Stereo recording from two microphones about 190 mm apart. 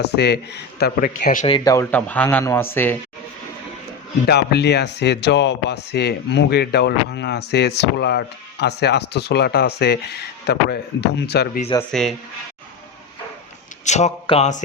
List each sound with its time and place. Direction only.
0.0 s speech: 60° left (ahead or behind); by 1.5 s 45° left (ahead or behind)
1.5 s speech: 25° left (ahead or behind)
4.3 s speech: 60° left (ahead or behind)
11.9 s speech: centre (ahead or behind)
13.8 s a sound: 35° left (ahead or behind)